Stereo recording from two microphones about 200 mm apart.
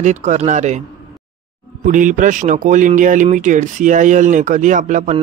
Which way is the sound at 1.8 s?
40° right (ahead or behind).